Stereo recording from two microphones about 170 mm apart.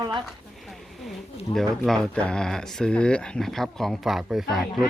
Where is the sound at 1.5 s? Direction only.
Centre (ahead or behind).